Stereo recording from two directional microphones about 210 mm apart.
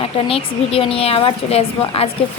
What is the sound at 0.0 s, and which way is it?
Speech, 25° left (ahead or behind).